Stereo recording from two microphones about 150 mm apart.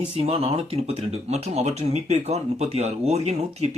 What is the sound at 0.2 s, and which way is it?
Speech, 40° right (ahead or behind).